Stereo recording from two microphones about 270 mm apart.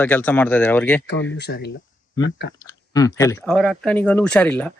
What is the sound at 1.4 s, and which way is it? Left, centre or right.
Speech, left.